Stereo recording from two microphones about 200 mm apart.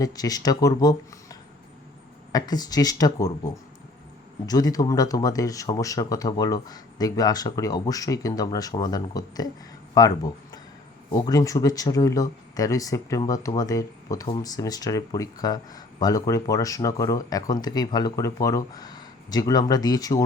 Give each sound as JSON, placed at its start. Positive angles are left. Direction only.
{"t": 0.0, "sound": "speech", "side_deg": 20}
{"t": 4.4, "sound": "speech", "side_deg": 20}